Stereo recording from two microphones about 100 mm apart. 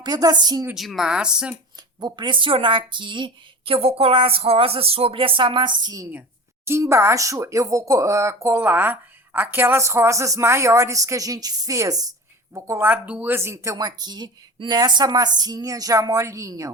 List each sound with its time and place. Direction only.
0.0 s speech: 40° right (ahead or behind)
0.7 s speech: centre (ahead or behind)
2.0 s a woman's voice: 45° right (ahead or behind)
6.7 s speech: 25° right (ahead or behind)
12.5 s speech: 25° right (ahead or behind)
13.7 s speech: 40° right (ahead or behind)